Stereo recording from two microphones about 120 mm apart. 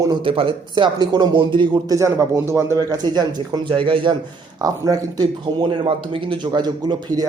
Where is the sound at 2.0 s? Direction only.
25° right (ahead or behind).